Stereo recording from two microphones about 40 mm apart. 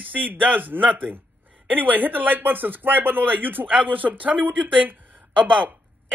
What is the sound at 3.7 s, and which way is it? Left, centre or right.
Speech, right.